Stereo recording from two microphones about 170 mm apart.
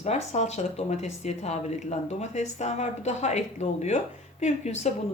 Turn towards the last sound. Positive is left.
turn(degrees=40)  # may be behind; listen again after turning